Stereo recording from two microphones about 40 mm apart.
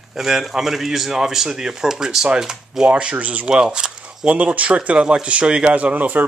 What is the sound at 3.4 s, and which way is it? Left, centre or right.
Speech, right.